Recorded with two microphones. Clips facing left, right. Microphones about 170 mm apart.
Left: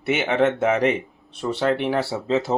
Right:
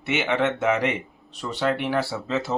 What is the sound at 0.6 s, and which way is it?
Speech, 35° left (ahead or behind).